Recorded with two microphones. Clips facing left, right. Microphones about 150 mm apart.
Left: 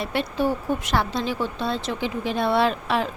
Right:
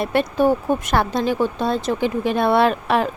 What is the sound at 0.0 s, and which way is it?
Speech, 50° right (ahead or behind).